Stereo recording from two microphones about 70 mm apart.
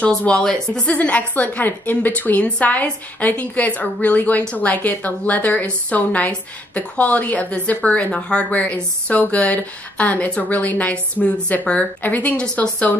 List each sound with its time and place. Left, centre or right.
0.0 s a woman's voice: centre
0.8 s a woman's voice: left